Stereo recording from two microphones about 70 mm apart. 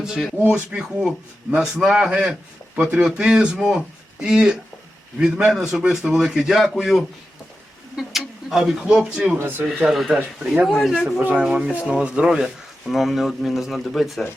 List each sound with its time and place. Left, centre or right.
0.3 s speech: centre
8.0 s a sound: centre
8.4 s speech: centre
9.4 s speech: right
9.8 s speech: centre
11.2 s speech: right
11.4 s speech: centre